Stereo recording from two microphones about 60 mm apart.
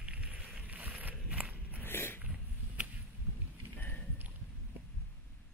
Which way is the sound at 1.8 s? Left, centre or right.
Left.